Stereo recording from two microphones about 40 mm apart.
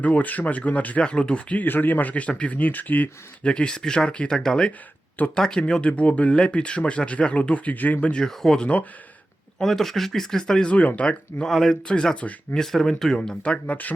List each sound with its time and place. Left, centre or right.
0.0 s speech: left
1.0 s speech: left
1.6 s speech: left
3.4 s speech: left
6.0 s speech: left
8.3 s speech: centre
8.6 s speech: left
9.6 s speech: centre
10.7 s speech: left
11.4 s speech: centre
13.2 s speech: left